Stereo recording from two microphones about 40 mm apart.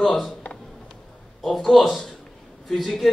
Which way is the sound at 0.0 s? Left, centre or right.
Centre.